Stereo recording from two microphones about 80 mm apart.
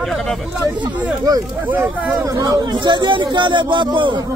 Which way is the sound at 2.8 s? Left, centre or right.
Right.